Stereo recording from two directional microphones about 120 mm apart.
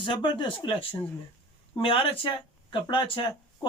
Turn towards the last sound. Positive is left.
turn(degrees=45)  # may be behind; listen again after turning